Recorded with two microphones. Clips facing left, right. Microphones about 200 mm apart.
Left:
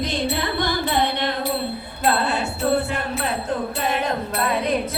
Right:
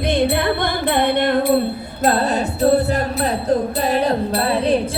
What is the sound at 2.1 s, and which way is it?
Music, 40° right (ahead or behind).